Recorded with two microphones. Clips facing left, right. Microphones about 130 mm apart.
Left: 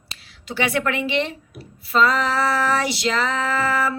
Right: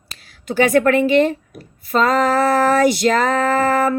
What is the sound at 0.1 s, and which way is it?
A woman's voice, 45° right (ahead or behind).